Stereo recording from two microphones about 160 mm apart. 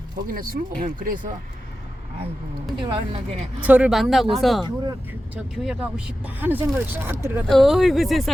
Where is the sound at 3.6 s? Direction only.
10° right (ahead or behind).